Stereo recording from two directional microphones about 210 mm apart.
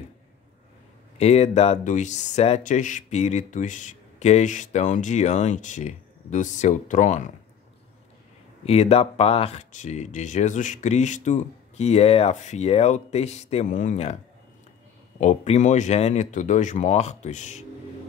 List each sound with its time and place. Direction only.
1.1 s speech: 30° left (ahead or behind)
8.6 s speech: 30° left (ahead or behind)
15.1 s speech: 35° left (ahead or behind)